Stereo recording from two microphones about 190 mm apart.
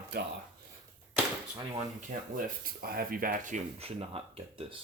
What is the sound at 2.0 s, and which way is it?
Speech, 45° right (ahead or behind).